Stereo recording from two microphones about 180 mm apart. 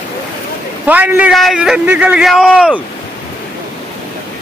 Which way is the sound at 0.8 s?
10° right (ahead or behind).